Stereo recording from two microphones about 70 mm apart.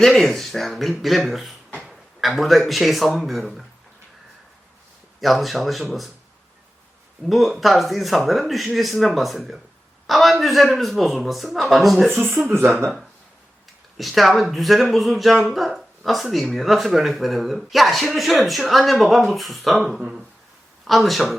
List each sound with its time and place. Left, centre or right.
0.0 s speech: centre
5.2 s speech: centre
7.3 s speech: centre
12.4 s speech: right
13.9 s speech: centre